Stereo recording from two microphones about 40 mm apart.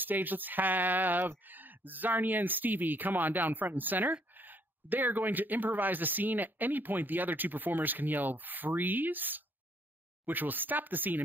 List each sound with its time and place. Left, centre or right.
0.0 s speech: right